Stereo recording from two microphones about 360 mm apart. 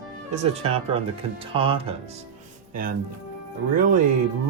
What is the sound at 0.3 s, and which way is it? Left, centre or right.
Speech, centre.